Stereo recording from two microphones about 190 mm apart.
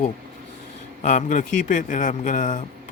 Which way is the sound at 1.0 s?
40° left (ahead or behind).